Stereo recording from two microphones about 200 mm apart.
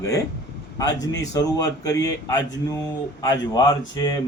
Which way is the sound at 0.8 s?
15° left (ahead or behind).